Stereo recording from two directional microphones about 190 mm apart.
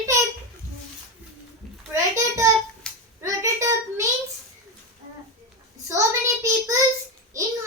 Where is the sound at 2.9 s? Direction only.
5° left (ahead or behind).